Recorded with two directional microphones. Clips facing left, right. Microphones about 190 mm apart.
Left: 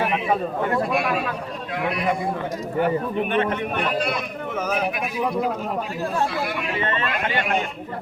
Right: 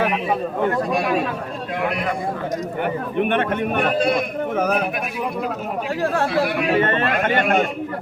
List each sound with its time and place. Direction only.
3.2 s speech: 55° right (ahead or behind)
6.0 s speech: 90° right
6.7 s speech: 50° right (ahead or behind)